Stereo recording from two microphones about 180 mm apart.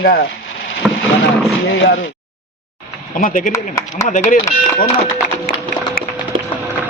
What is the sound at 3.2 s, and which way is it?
Speech, 45° left (ahead or behind).